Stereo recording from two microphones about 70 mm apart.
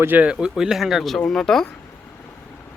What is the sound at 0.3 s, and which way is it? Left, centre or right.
Speech, centre.